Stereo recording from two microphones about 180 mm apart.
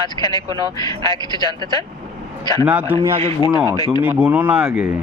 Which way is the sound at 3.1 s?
30° right (ahead or behind).